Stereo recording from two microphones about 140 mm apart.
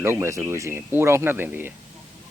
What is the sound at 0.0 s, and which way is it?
Speech, 20° right (ahead or behind).